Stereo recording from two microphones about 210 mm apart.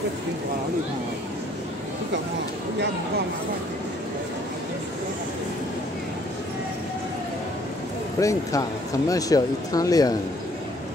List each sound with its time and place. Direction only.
8.2 s speech: 15° left (ahead or behind)